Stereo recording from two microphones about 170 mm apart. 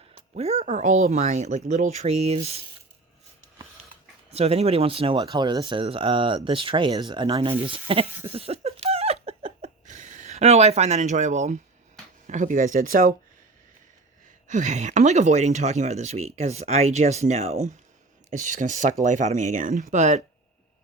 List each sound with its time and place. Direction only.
0.1 s speech: 40° right (ahead or behind)
4.3 s speech: 35° right (ahead or behind)
8.2 s laughter: 35° right (ahead or behind)
12.3 s speech: 50° right (ahead or behind)
14.4 s speech: 45° right (ahead or behind)